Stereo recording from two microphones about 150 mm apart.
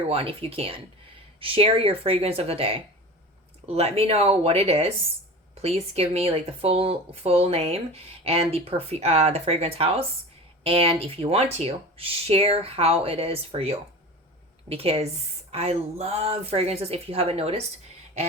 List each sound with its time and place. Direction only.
0.1 s speech: 40° right (ahead or behind)